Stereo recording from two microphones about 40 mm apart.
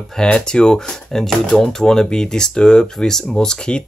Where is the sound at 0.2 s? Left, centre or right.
Left.